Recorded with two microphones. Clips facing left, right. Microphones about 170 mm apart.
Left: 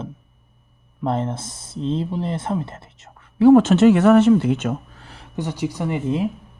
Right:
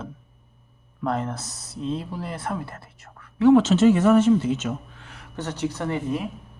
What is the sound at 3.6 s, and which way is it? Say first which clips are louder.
Speech: left 4 dB; 60° left (ahead or behind).